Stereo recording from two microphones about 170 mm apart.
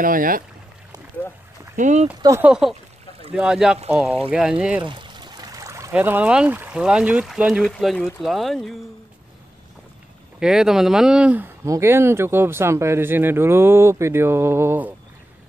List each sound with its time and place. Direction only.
0.0 s speech: 55° right (ahead or behind)
1.8 s speech: 45° right (ahead or behind)
2.2 s speech: 15° right (ahead or behind)
3.3 s speech: 5° right (ahead or behind)
4.8 s speech: 30° right (ahead or behind); by 8.7 s centre (ahead or behind)
10.4 s speech: 5° right (ahead or behind)